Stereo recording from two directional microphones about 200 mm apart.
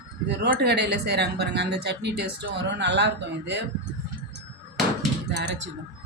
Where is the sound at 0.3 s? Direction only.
55° right (ahead or behind).